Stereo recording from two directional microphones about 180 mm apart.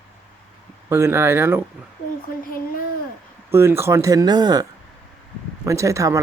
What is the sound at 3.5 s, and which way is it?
Speech, 15° right (ahead or behind).